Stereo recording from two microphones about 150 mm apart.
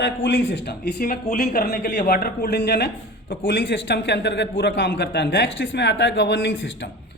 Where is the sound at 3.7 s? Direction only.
90° left.